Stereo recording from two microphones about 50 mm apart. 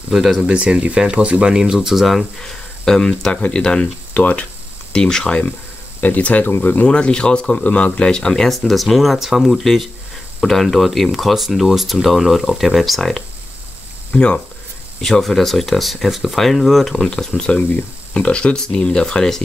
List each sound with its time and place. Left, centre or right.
0.1 s speech: centre
0.5 s speech: right
1.5 s speech: centre
2.4 s a sound: centre
3.2 s speech: centre
4.2 s speech: left
4.9 s speech: centre
5.9 s speech: left
6.9 s speech: centre
7.5 s speech: left; by 13.2 s centre
14.1 s speech: left
15.0 s speech: centre
17.4 s speech: centre